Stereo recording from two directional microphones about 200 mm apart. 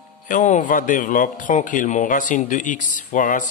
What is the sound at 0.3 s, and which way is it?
Speech, 35° left (ahead or behind).